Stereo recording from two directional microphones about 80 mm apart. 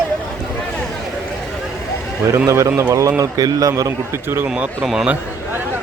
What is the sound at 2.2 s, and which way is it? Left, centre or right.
A man's voice, right.